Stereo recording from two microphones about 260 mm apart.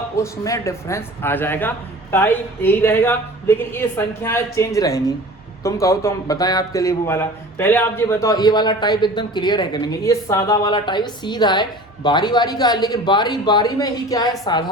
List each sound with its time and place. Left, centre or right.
0.2 s a man's voice: centre